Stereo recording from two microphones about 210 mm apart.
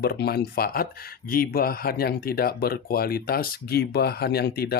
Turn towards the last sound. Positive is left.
turn(degrees=50)  # may be behind; listen again after turning